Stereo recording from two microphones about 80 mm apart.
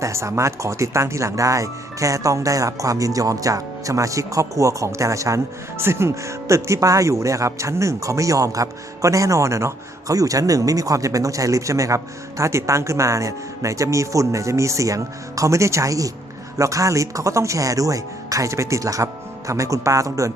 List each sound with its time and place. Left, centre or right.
0.0 s speech: right